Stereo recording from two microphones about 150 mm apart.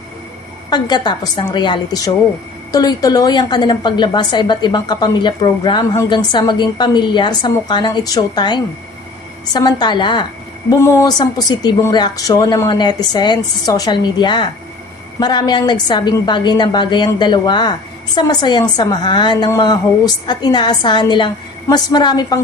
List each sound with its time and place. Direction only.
0.7 s speech: 30° left (ahead or behind)
10.7 s speech: 20° left (ahead or behind)